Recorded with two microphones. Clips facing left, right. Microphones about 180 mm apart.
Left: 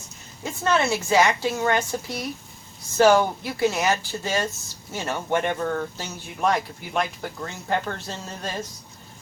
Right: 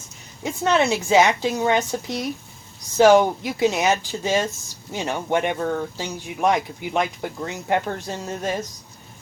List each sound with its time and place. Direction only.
0.4 s speech: 20° right (ahead or behind)